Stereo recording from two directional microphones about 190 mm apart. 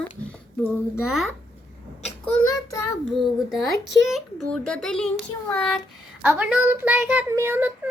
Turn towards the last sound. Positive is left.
turn(degrees=-10)  # may be behind; listen again after turning